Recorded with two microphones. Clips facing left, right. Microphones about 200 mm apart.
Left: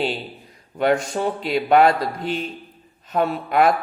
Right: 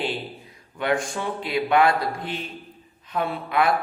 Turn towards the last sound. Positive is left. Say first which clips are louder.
# left 4 dB
turn(degrees=45)  # may be behind; listen again after turning